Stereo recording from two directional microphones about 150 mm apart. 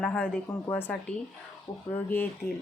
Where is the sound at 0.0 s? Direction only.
5° left (ahead or behind).